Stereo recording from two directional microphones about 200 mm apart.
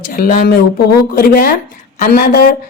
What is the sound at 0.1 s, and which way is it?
A woman's voice, 40° left (ahead or behind).